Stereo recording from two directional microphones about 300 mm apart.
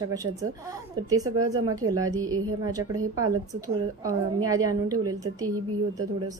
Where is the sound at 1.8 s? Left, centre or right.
Right.